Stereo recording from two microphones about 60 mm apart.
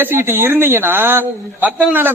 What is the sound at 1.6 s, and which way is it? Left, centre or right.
Speech, right.